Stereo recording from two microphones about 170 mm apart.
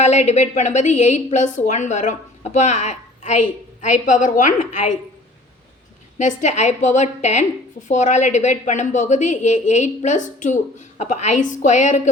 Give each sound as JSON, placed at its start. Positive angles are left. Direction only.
{"t": 0.0, "sound": "a woman's voice", "side_deg": 40}
{"t": 6.1, "sound": "a woman's voice", "side_deg": 45}